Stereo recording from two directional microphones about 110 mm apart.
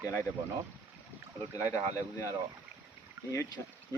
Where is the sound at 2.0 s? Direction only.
30° left (ahead or behind).